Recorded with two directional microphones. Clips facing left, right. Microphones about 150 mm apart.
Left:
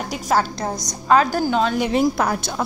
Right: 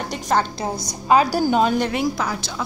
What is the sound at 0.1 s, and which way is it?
Speech, 5° left (ahead or behind).